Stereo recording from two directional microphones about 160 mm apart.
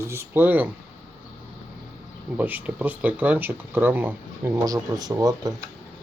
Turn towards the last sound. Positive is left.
turn(degrees=-25)  # may be behind; listen again after turning